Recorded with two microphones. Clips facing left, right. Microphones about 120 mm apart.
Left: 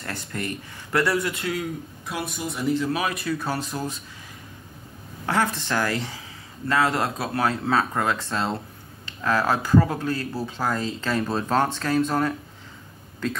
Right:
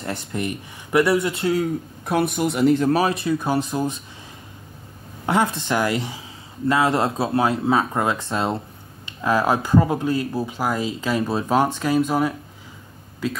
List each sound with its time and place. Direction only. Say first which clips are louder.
0.0 s speech: right 5 dB; 20° right (ahead or behind)
2.0 s speech: right 10 dB; 60° right (ahead or behind)
2.9 s speech: right 6 dB; 30° right (ahead or behind)
5.2 s speech: right 3 dB; 20° right (ahead or behind)